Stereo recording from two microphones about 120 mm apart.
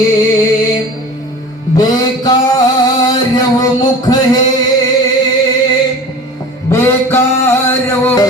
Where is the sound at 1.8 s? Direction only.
35° left (ahead or behind).